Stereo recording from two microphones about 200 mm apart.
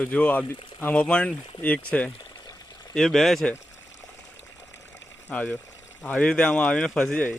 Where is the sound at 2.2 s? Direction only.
20° left (ahead or behind).